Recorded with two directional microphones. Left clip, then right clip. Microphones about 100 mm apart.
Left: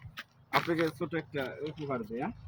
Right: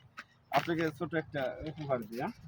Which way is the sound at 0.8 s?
25° right (ahead or behind).